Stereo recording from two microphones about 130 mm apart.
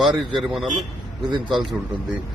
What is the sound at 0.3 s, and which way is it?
Speech, centre (ahead or behind).